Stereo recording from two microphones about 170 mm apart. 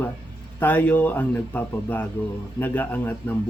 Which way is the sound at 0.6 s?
10° left (ahead or behind).